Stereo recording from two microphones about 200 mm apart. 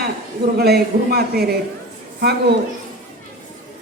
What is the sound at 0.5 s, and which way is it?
A woman's voice, 50° right (ahead or behind).